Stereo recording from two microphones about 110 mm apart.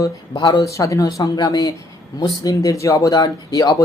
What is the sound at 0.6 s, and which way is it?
Speech, 30° left (ahead or behind).